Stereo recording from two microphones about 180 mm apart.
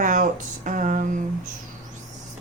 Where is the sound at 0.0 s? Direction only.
45° right (ahead or behind).